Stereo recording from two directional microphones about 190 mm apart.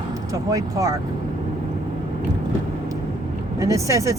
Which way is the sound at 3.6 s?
15° right (ahead or behind).